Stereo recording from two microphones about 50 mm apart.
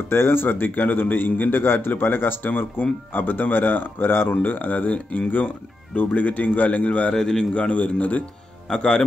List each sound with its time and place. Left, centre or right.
0.1 s a man's voice: left
4.4 s speech: left
7.2 s a man's voice: centre
7.5 s speech: left
8.6 s speech: centre